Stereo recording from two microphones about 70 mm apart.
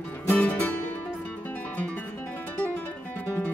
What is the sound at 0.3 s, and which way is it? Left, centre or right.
Music, left.